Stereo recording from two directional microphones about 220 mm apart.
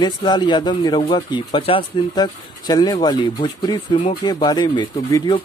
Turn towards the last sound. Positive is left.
turn(degrees=20)  # may be behind; listen again after turning